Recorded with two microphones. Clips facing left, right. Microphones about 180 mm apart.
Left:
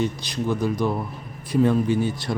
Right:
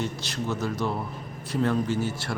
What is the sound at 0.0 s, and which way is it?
Speech, 15° left (ahead or behind).